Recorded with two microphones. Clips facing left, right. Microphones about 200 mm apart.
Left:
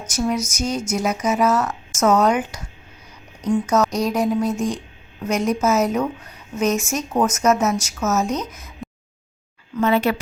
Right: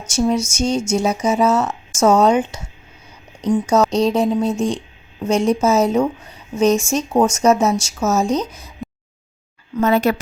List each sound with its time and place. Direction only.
0.1 s speech: 30° right (ahead or behind)
9.7 s a woman's voice: 40° right (ahead or behind)